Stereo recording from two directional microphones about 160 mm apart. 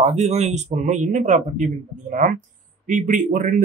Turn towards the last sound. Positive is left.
turn(degrees=-55)  # may be behind; listen again after turning